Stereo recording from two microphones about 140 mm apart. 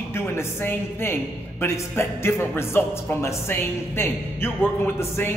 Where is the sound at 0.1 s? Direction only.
15° left (ahead or behind).